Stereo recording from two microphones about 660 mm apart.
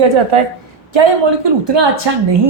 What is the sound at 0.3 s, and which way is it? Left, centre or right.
Speech, right.